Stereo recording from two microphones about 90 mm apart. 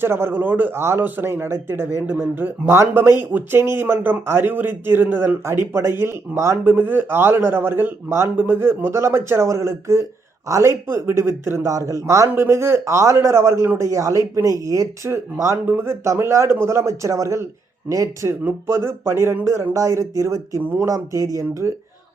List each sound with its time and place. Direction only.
0.0 s speech: 25° right (ahead or behind)